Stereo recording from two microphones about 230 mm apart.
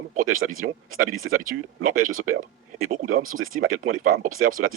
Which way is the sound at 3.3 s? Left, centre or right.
Right.